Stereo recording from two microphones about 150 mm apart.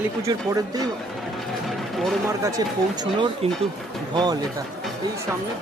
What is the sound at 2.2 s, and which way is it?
Speech, 20° right (ahead or behind).